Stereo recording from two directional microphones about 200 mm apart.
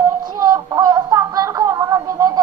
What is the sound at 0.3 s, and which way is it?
Music, 20° right (ahead or behind).